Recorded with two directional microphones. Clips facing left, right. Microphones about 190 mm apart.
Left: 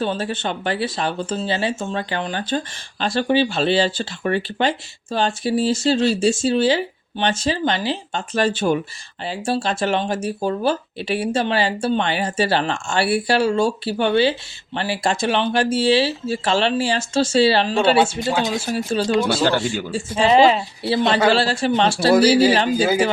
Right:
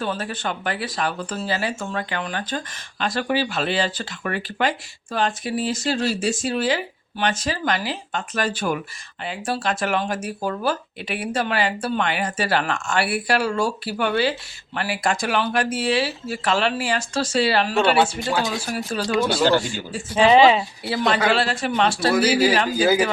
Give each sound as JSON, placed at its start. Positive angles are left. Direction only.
{"t": 0.0, "sound": "speech", "side_deg": 25}
{"t": 20.2, "sound": "speech", "side_deg": 0}
{"t": 20.8, "sound": "speech", "side_deg": 25}